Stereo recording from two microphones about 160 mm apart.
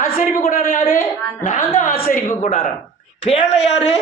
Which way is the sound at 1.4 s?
55° left (ahead or behind).